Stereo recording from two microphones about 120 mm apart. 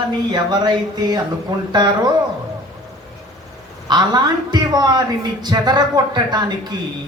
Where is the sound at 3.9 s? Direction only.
35° right (ahead or behind).